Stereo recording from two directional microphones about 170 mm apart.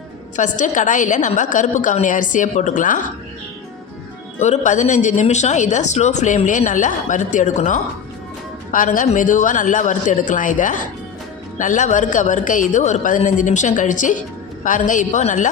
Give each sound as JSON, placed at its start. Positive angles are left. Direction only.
{"t": 0.3, "sound": "speech", "side_deg": 45}
{"t": 4.4, "sound": "speech", "side_deg": 40}